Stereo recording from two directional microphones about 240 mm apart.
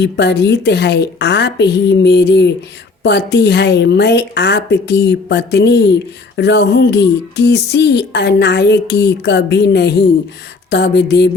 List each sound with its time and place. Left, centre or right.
0.0 s a woman's voice: left